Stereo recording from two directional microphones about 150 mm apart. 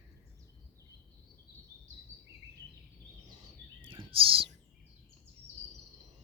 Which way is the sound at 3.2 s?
30° right (ahead or behind).